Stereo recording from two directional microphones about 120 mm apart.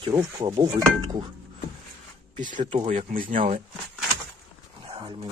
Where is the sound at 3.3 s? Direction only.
90° right.